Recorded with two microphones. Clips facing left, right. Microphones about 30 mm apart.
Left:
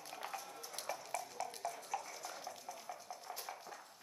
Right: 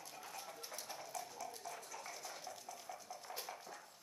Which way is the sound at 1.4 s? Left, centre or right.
Left.